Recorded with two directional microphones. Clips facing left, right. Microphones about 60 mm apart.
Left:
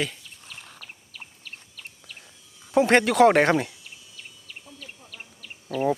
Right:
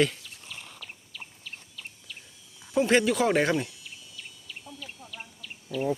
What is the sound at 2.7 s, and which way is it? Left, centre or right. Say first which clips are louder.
Speech: left 5 dB; left.